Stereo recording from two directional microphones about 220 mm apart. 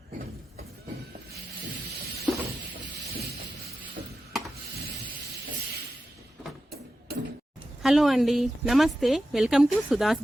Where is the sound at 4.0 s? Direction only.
45° right (ahead or behind).